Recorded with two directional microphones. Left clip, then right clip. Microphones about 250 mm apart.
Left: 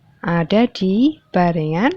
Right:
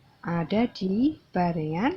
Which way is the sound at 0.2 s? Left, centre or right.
Left.